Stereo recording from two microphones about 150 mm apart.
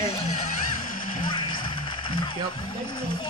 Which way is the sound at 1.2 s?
30° left (ahead or behind).